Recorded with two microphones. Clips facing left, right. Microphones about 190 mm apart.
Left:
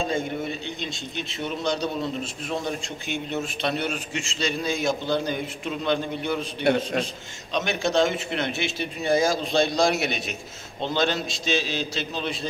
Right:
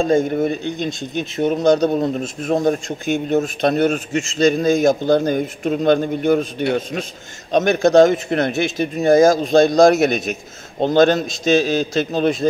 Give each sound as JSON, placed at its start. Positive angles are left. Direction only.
{"t": 0.0, "sound": "speech", "side_deg": -45}
{"t": 7.5, "sound": "speech", "side_deg": -45}